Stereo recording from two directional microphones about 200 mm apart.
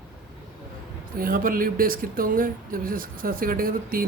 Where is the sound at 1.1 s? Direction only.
45° right (ahead or behind).